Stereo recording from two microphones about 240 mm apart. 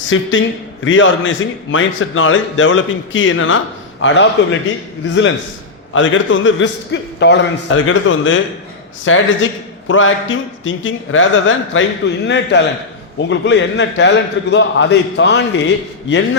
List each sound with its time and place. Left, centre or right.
0.1 s a man's voice: left
5.9 s a man's voice: left